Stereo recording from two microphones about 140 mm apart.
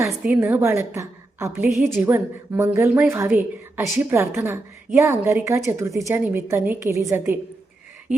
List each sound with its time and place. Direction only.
0.3 s a woman's voice: 15° right (ahead or behind)
1.7 s a woman's voice: centre (ahead or behind)
2.0 s a woman's voice: 20° right (ahead or behind)